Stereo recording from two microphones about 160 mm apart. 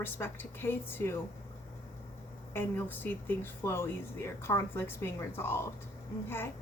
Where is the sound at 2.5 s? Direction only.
10° left (ahead or behind).